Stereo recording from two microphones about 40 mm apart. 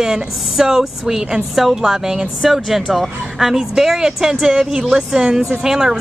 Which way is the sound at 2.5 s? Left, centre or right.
Centre.